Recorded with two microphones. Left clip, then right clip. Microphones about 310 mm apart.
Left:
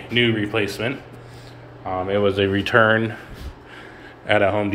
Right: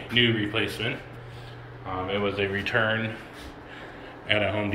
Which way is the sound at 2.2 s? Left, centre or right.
Left.